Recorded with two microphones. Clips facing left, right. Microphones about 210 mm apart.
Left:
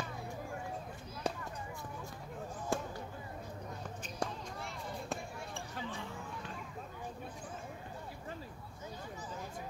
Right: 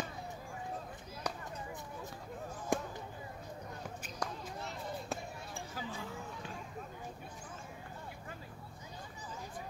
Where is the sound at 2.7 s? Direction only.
15° right (ahead or behind).